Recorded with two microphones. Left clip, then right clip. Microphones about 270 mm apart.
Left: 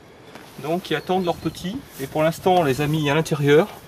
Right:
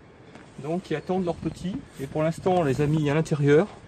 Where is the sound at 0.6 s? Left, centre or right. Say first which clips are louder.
Left 6 dB; centre.